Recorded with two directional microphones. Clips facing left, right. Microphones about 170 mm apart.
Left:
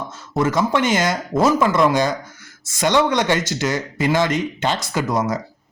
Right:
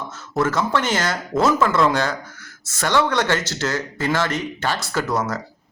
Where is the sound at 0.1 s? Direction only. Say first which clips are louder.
Left 1 dB; 15° left (ahead or behind).